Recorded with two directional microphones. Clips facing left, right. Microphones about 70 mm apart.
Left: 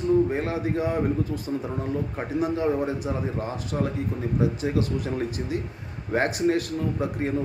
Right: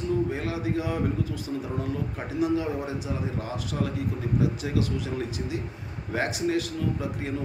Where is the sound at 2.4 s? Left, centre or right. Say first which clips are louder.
Left 1 dB; left.